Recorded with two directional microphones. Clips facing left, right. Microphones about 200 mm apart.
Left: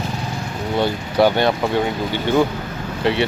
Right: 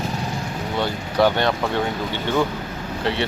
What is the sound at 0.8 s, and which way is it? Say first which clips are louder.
Speech: left 3 dB; 10° left (ahead or behind).